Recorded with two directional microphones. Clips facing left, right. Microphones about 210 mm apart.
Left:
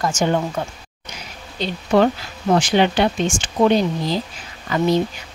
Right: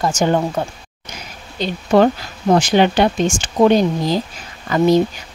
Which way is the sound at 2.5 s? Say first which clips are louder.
Right 3 dB; 45° right (ahead or behind).